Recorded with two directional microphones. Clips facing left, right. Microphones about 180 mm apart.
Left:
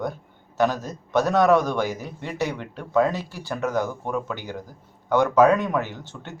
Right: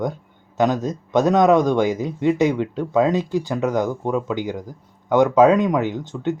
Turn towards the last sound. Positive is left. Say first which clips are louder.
# right 13 dB
turn(degrees=-15)  # may be behind; listen again after turning